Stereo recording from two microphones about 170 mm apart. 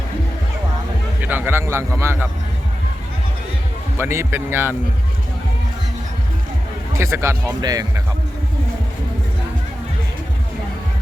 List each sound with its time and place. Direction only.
1.2 s speech: 10° right (ahead or behind)
3.9 s speech: 15° right (ahead or behind)
6.9 s speech: 15° right (ahead or behind)